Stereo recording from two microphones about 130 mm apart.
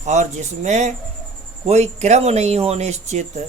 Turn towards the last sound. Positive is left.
turn(degrees=-60)  # may be behind; listen again after turning